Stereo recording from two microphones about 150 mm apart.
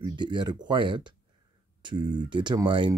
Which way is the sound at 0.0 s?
30° right (ahead or behind).